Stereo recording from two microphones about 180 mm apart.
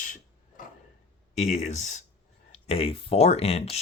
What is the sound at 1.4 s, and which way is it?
Speech, 40° left (ahead or behind).